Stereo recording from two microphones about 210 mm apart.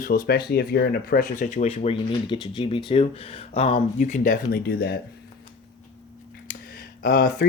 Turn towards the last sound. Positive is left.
turn(degrees=40)  # may be behind; listen again after turning